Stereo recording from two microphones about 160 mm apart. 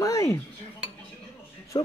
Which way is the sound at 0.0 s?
20° left (ahead or behind).